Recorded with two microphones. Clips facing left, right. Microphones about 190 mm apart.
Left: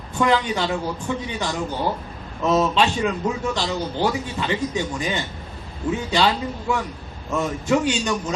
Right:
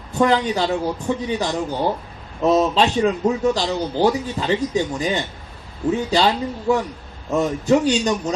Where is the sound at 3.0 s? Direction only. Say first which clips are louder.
Right 5 dB; 35° right (ahead or behind).